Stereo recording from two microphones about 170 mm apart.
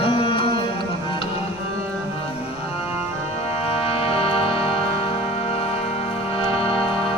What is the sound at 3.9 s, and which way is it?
Music, 35° left (ahead or behind).